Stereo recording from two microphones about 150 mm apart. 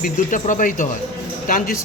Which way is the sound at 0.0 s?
60° left (ahead or behind).